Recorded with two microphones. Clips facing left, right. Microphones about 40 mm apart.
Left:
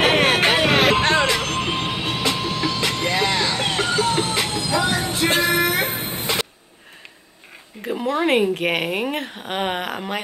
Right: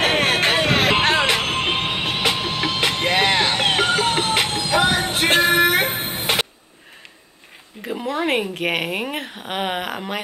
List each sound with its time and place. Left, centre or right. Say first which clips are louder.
0.0 s a sound: left 2 dB; centre
1.2 s music: right 1 dB; right
7.8 s speech: left 2 dB; centre